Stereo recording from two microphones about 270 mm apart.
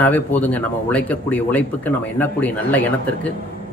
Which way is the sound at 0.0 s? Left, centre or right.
Centre.